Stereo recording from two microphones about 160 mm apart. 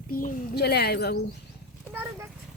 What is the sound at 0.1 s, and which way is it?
A child's voice, 60° left (ahead or behind).